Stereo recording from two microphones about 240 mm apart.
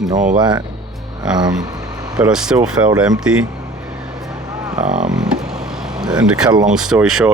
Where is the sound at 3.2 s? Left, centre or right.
Centre.